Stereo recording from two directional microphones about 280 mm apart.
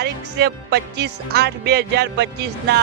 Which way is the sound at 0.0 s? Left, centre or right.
Right.